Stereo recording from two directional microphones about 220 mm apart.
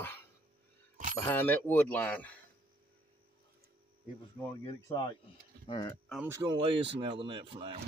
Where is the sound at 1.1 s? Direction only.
10° left (ahead or behind).